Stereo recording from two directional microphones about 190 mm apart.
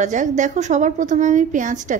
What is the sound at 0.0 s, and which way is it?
A woman's voice, 40° right (ahead or behind).